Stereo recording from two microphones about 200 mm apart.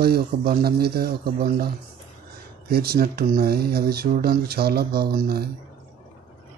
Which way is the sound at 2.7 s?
50° right (ahead or behind).